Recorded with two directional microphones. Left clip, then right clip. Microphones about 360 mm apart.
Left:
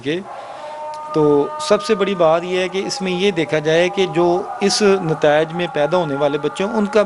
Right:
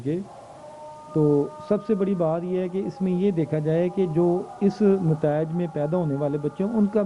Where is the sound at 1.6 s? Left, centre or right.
Centre.